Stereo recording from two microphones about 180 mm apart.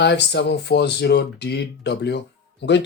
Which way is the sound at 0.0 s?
70° left (ahead or behind).